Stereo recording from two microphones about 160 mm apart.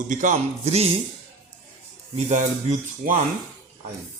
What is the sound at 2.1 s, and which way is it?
A man's voice, 50° right (ahead or behind).